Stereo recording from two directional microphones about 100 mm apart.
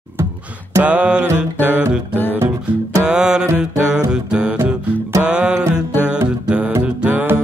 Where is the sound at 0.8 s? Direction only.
10° right (ahead or behind).